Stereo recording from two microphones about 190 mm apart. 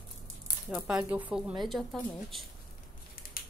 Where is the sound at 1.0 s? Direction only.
10° right (ahead or behind).